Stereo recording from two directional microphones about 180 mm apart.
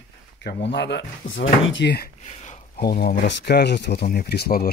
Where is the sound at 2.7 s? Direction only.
55° left (ahead or behind).